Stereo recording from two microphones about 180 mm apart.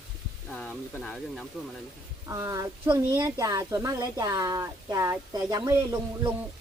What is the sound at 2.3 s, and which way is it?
Speech, 20° right (ahead or behind).